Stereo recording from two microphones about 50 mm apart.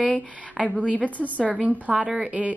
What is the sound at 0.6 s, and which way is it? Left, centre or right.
Speech, centre.